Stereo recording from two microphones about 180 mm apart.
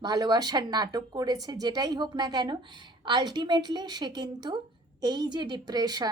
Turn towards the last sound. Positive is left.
turn(degrees=-20)  # may be behind; listen again after turning